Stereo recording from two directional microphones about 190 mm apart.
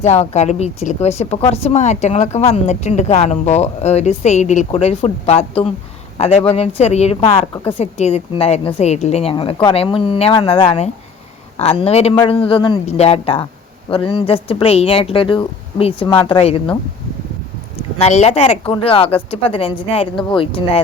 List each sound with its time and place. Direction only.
0.0 s speech: 35° left (ahead or behind)
7.5 s a woman's voice: 10° left (ahead or behind)
7.8 s speech: 35° left (ahead or behind)
17.9 s speech: 35° left (ahead or behind)